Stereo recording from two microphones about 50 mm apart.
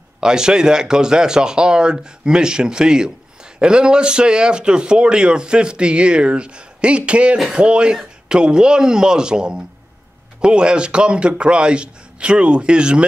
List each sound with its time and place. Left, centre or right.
0.2 s speech: centre
7.3 s speech: centre
7.6 s speech: right